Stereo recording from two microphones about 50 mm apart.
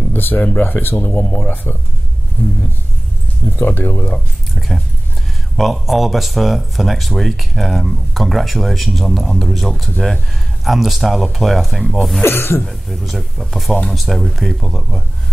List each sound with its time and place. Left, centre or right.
0.1 s speech: left
3.5 s speech: left
4.6 s speech: centre
12.2 s speech: left
12.6 s speech: centre